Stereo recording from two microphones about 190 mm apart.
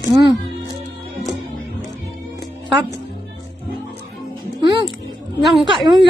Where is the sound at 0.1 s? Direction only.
20° right (ahead or behind).